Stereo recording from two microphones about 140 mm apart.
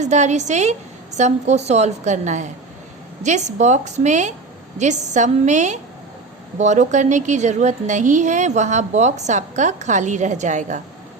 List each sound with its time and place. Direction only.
0.0 s a woman's voice: 55° right (ahead or behind)